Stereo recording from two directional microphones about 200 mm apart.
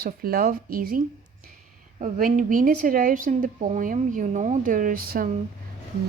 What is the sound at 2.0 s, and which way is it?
A woman's voice, 40° right (ahead or behind).